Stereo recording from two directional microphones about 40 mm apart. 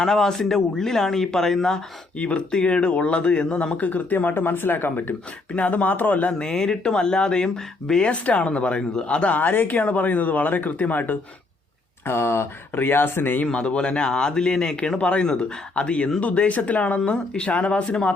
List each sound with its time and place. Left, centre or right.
0.0 s speech: centre
2.1 s speech: left
3.8 s speech: left
4.4 s speech: left
5.5 s speech: left
6.4 s speech: centre
8.1 s speech: left
9.4 s speech: left
12.0 s speech: left
13.4 s speech: left